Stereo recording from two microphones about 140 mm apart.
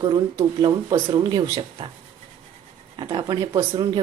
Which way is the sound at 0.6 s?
35° right (ahead or behind).